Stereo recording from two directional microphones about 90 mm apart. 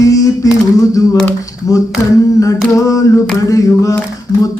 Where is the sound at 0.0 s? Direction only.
40° left (ahead or behind).